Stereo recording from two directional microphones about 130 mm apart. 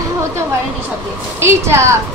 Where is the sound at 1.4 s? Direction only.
20° right (ahead or behind).